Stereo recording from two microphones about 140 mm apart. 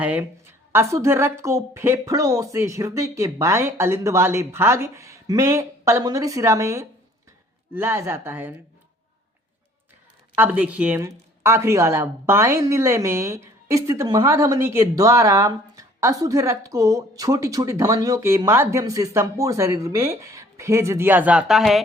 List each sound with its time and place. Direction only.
0.0 s speech: 10° right (ahead or behind)
10.3 s speech: 10° right (ahead or behind)